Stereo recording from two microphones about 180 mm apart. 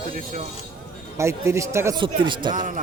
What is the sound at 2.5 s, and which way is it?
Speech, 45° right (ahead or behind).